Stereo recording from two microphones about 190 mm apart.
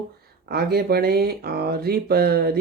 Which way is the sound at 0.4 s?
55° right (ahead or behind).